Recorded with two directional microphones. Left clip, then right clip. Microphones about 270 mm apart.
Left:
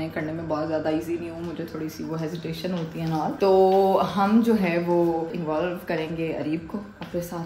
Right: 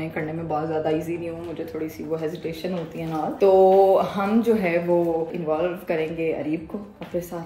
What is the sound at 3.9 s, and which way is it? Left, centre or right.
Speech, centre.